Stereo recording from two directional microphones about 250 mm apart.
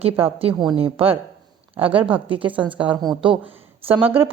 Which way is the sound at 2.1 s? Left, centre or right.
Right.